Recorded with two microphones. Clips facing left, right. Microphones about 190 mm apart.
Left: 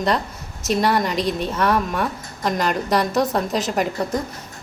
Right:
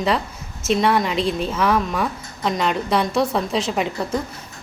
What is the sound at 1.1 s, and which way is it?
Speech, 30° right (ahead or behind).